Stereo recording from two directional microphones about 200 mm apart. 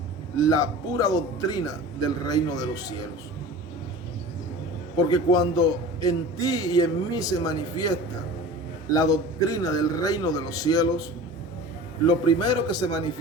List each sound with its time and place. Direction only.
0.3 s a man's voice: 15° left (ahead or behind)
4.9 s a man's voice: 20° left (ahead or behind)
12.0 s a man's voice: 20° left (ahead or behind)